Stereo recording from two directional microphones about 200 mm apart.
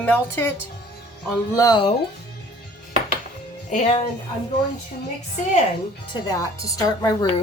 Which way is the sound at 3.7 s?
30° left (ahead or behind).